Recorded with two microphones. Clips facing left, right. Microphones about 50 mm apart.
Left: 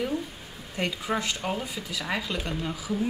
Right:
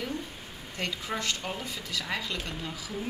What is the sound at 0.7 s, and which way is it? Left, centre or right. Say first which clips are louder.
Speech: left 5 dB; centre.